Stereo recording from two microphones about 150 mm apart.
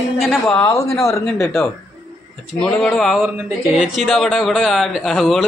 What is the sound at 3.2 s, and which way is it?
A woman's voice, 10° right (ahead or behind).